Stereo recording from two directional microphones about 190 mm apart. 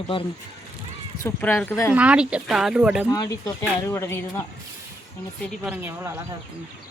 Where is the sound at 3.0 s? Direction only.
20° left (ahead or behind).